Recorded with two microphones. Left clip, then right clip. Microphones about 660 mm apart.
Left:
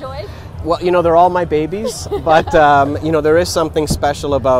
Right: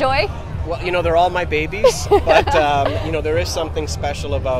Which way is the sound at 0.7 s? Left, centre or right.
Left.